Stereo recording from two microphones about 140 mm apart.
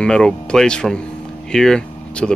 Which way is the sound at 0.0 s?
5° left (ahead or behind).